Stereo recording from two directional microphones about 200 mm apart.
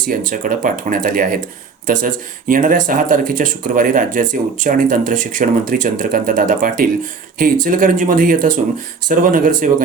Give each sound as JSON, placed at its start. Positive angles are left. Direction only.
{"t": 0.1, "sound": "speech", "side_deg": -40}